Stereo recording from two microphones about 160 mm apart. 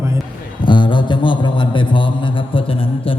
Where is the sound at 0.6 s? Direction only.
30° left (ahead or behind).